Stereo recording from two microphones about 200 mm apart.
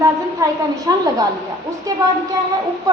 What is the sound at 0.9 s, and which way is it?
Speech, 15° right (ahead or behind).